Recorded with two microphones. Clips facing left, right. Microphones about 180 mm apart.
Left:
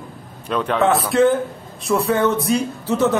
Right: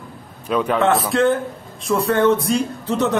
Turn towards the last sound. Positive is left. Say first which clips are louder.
# left 2 dB
turn(degrees=5)  # may be behind; listen again after turning